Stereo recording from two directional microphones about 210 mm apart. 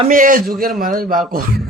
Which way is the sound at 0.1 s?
40° right (ahead or behind).